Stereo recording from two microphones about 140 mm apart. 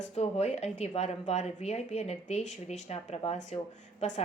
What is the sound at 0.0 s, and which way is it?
A woman's voice, 50° left (ahead or behind).